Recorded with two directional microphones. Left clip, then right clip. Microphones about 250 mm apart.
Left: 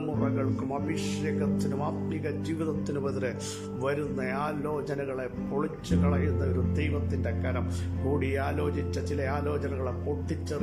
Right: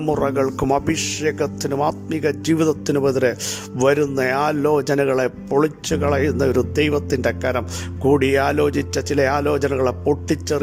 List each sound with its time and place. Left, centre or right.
0.2 s speech: right